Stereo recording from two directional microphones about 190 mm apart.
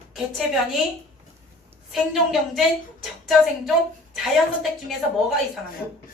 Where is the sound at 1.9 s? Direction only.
Centre (ahead or behind).